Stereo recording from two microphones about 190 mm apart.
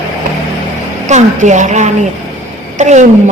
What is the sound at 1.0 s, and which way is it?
A man's voice, 40° right (ahead or behind).